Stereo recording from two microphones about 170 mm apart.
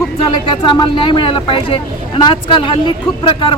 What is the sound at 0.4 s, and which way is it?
Speech, 25° left (ahead or behind).